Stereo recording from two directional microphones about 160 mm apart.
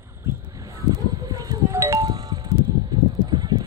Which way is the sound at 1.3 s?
20° right (ahead or behind).